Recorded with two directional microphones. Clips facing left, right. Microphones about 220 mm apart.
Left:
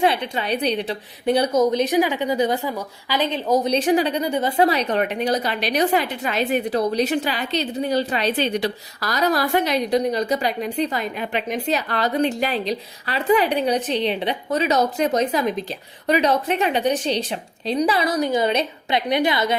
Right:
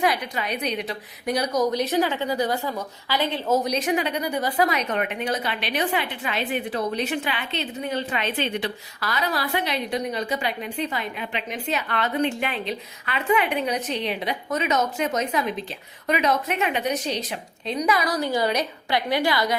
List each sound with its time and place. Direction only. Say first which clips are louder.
0.0 s a woman's voice: left 4 dB; 30° left (ahead or behind)
3.7 s a woman's voice: left 5 dB; 30° left (ahead or behind)